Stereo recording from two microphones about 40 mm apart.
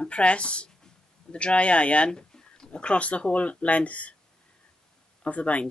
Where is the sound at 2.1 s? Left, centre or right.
Centre; by 4.1 s left.